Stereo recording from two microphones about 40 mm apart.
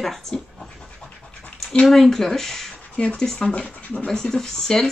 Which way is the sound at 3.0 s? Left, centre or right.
Left.